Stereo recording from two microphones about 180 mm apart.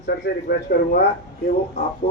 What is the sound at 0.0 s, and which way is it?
Speech, 65° left (ahead or behind).